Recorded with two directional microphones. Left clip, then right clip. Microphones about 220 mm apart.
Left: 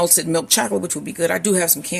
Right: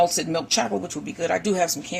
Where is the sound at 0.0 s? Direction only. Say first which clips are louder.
Left 2 dB; 40° left (ahead or behind).